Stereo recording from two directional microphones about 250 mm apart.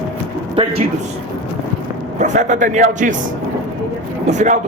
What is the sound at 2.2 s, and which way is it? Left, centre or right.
Speech, right.